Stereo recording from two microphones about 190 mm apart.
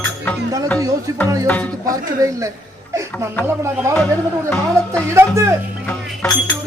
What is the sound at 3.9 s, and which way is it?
Speech, 15° right (ahead or behind).